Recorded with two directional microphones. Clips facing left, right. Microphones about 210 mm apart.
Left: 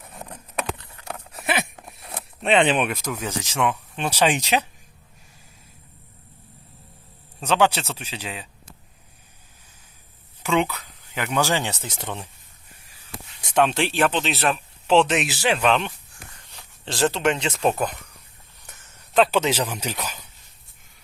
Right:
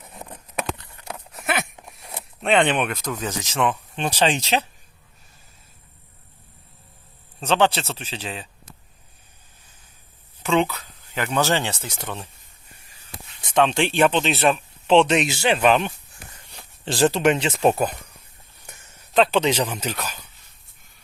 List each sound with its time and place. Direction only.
1.3 s speech: centre (ahead or behind)
7.3 s speech: 10° left (ahead or behind)
10.8 s speech: 10° left (ahead or behind)
13.4 s speech: 10° left (ahead or behind)
19.1 s speech: 5° left (ahead or behind)